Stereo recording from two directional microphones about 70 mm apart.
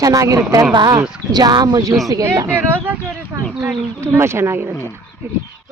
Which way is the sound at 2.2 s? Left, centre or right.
Right.